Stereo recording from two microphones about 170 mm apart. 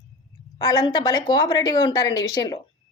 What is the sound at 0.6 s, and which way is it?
A woman's voice, 20° left (ahead or behind).